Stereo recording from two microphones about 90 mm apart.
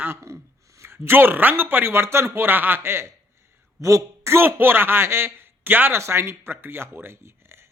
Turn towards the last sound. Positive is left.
turn(degrees=-30)  # may be behind; listen again after turning